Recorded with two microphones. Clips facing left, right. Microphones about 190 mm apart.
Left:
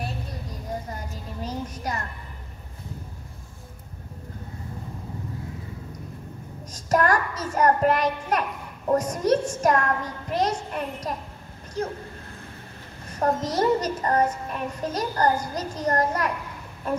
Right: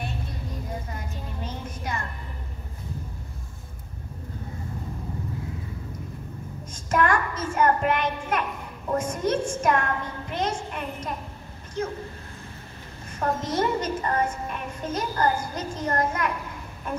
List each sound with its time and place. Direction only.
0.8 s music: 35° left (ahead or behind)
6.7 s a child's voice: 40° left (ahead or behind)
13.1 s a woman's voice: 35° left (ahead or behind)